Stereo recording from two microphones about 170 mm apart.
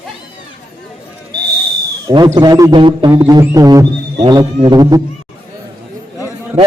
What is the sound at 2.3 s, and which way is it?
Speech, 25° right (ahead or behind).